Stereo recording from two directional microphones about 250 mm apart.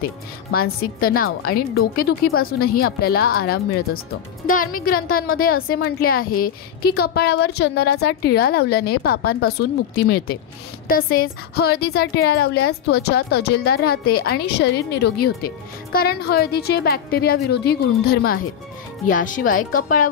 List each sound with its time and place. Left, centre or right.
0.5 s a woman's voice: left